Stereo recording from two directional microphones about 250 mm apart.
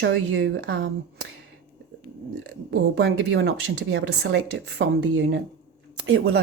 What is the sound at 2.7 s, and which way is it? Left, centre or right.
Speech, right.